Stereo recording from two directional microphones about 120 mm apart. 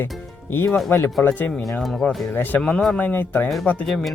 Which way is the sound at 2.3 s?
15° left (ahead or behind).